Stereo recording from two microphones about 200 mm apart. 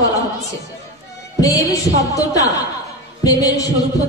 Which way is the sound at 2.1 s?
15° left (ahead or behind).